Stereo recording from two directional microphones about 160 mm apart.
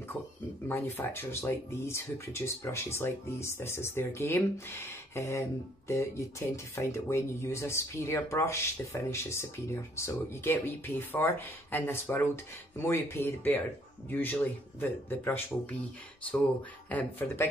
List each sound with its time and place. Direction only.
0.7 s speech: 15° left (ahead or behind)
16.9 s speech: 10° left (ahead or behind)